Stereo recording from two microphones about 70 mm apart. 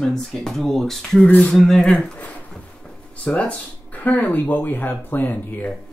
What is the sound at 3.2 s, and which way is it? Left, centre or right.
Speech, centre.